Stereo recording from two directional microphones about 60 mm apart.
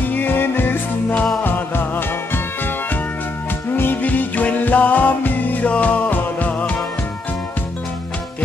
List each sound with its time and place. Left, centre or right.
0.1 s music: left